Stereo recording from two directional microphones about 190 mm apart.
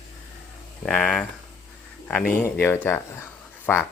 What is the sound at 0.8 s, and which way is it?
Speech, 5° left (ahead or behind).